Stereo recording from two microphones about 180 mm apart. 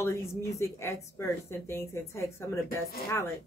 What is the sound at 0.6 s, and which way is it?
Speech, 15° left (ahead or behind).